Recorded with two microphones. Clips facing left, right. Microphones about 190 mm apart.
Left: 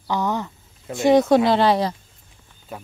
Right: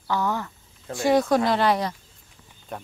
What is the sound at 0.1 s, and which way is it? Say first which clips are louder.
Speech: left 2 dB; 20° left (ahead or behind).